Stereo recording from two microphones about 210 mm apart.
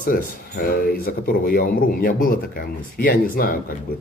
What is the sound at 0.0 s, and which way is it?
Speech, 45° left (ahead or behind).